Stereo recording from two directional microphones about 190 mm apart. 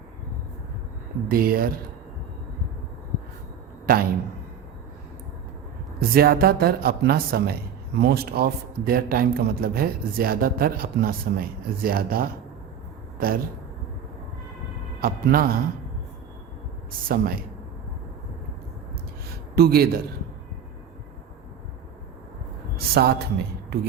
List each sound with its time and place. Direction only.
1.3 s a man's voice: 50° right (ahead or behind)
6.0 s a man's voice: 50° right (ahead or behind)
15.0 s a man's voice: 50° right (ahead or behind)
17.1 s a man's voice: 50° right (ahead or behind)
19.3 s a sound: 55° right (ahead or behind)
23.0 s a woman's voice: 60° right (ahead or behind)